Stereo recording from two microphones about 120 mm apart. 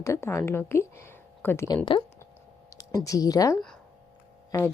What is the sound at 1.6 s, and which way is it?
Speech, 35° left (ahead or behind).